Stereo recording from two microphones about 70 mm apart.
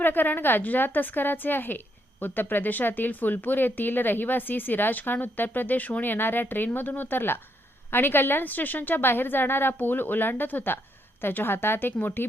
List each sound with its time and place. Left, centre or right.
0.0 s a woman's voice: left